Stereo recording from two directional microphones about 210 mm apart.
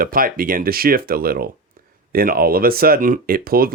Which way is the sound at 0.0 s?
45° right (ahead or behind).